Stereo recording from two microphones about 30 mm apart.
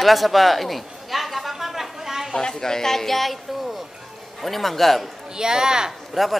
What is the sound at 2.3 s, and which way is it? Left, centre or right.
Speech, left.